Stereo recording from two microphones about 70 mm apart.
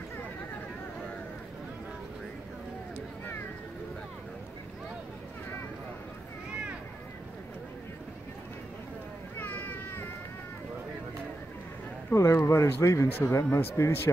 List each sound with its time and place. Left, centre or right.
9.4 s cat: left
12.1 s speech: left